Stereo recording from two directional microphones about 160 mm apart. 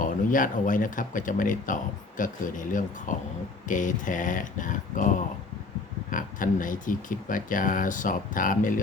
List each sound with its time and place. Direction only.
0.0 s speech: 55° left (ahead or behind)